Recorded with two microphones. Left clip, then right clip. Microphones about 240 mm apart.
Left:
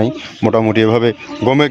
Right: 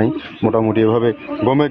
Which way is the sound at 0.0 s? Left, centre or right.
Left.